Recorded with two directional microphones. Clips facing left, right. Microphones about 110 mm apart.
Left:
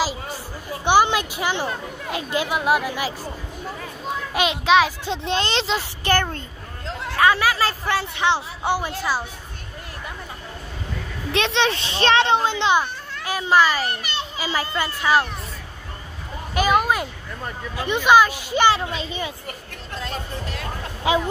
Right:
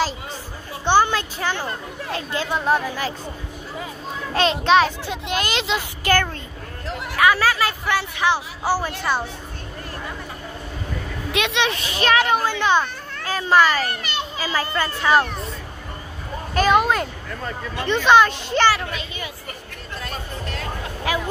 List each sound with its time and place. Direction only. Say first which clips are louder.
0.8 s speech: even; 15° left (ahead or behind)
4.3 s a child's voice: right 2 dB; 10° left (ahead or behind)
5.0 s speech: left 2 dB; 30° left (ahead or behind)
6.0 s a child's voice: right 1 dB; 25° left (ahead or behind)
11.3 s a child's voice: left 1 dB; 30° left (ahead or behind); by 15.2 s 5° left (ahead or behind)
16.5 s speech: right 2 dB; 5° left (ahead or behind)
18.7 s a child's voice: left 1 dB; 25° left (ahead or behind)
20.4 s speech: right 1 dB; 15° left (ahead or behind)